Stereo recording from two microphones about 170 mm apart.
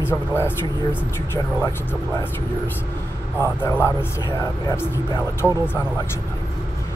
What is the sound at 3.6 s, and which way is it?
Speech, 15° left (ahead or behind).